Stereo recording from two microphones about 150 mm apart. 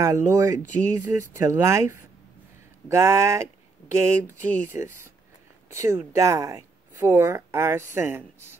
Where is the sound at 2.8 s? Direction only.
20° right (ahead or behind).